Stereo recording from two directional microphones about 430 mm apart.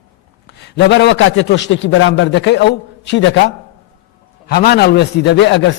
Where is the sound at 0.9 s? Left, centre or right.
Left.